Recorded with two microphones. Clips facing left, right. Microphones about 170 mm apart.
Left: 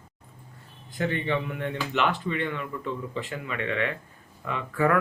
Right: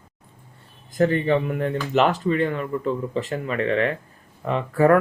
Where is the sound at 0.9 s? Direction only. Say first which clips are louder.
Right 8 dB; 40° right (ahead or behind).